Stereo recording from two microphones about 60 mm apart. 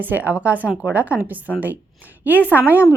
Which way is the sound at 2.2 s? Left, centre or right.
Right.